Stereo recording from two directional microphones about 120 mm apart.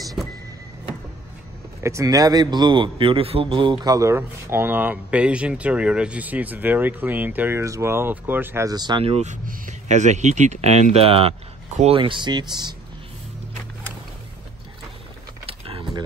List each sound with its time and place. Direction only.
1.8 s a man's voice: 25° right (ahead or behind)
8.6 s speech: 35° right (ahead or behind)
9.0 s speech: 65° right (ahead or behind)
9.8 s speech: 80° right; by 12.0 s 60° right (ahead or behind)
12.0 s speech: 40° right (ahead or behind)
15.4 s a sound: 50° right (ahead or behind)